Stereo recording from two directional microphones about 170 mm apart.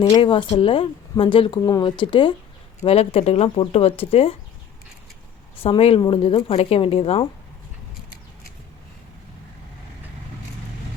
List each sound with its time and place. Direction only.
0.1 s speech: 30° left (ahead or behind)
5.5 s speech: 35° left (ahead or behind)